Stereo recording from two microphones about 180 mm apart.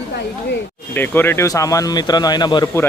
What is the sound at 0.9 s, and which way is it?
A man's voice, 10° left (ahead or behind).